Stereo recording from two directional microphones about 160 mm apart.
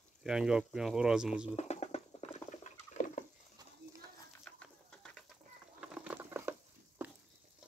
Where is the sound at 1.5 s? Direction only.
45° left (ahead or behind).